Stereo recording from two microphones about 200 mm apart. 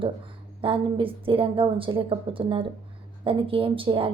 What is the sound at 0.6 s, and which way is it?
Speech, 25° right (ahead or behind).